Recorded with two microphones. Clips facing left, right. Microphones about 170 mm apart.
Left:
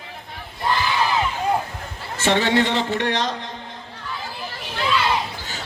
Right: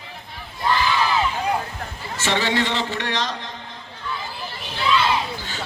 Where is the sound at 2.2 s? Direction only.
50° left (ahead or behind).